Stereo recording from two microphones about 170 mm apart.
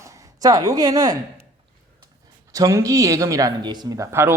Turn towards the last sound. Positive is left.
turn(degrees=-15)  # may be behind; listen again after turning